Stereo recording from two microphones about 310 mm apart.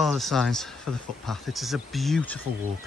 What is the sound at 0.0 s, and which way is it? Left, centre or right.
Speech, centre.